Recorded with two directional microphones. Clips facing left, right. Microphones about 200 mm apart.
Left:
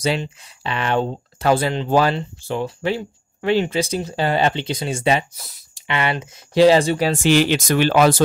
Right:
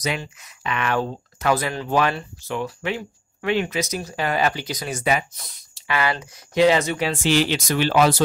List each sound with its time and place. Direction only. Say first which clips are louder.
0.0 s speech: left 5 dB; 30° left (ahead or behind)
5.3 s speech: left 1 dB; 5° left (ahead or behind)
5.8 s speech: left 1 dB; 25° left (ahead or behind)
7.2 s speech: left 4 dB; 55° left (ahead or behind)